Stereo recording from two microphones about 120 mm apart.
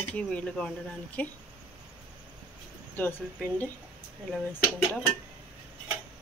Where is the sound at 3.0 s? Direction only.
15° left (ahead or behind).